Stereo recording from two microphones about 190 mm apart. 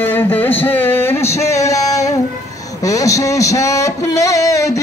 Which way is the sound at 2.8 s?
15° left (ahead or behind).